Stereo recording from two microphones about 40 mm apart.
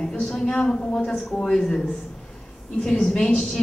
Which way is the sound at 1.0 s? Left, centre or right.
Centre.